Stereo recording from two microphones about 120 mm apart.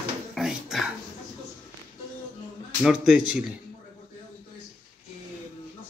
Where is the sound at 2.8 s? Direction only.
10° right (ahead or behind).